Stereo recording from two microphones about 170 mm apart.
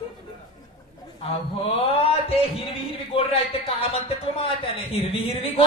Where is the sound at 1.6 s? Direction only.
35° left (ahead or behind).